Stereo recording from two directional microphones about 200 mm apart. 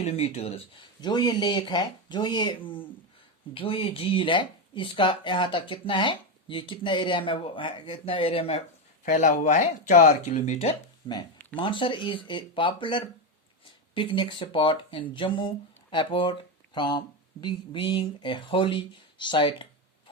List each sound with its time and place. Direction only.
0.0 s speech: 30° left (ahead or behind)
9.0 s speech: 40° left (ahead or behind)
11.0 s speech: 20° left (ahead or behind)